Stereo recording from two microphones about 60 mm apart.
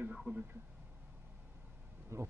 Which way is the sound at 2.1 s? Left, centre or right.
Right.